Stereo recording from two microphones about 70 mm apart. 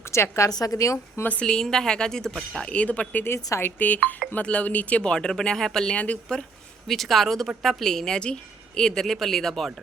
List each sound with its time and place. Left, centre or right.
0.1 s a woman's voice: left
0.5 s a woman's voice: left
1.4 s speech: centre
3.2 s a woman's voice: left
3.8 s speech: left
6.8 s speech: centre